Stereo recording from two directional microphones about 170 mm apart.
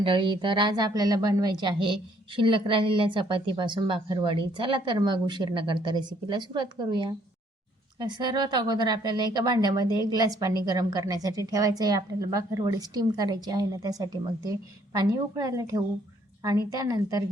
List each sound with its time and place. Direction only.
0.0 s a woman's voice: 30° right (ahead or behind)